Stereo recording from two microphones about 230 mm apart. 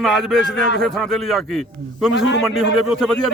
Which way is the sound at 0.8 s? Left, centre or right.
Centre.